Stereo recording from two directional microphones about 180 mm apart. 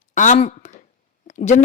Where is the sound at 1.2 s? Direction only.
40° left (ahead or behind).